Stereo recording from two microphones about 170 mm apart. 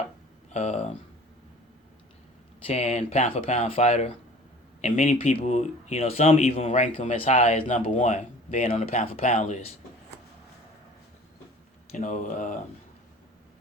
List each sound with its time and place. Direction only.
0.5 s speech: 40° left (ahead or behind)
2.6 s speech: 40° left (ahead or behind)
5.1 s speech: 35° left (ahead or behind)
11.9 s speech: 50° left (ahead or behind)